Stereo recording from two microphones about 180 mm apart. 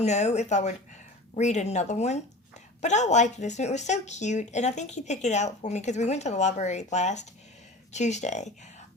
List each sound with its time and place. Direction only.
0.0 s speech: 40° left (ahead or behind)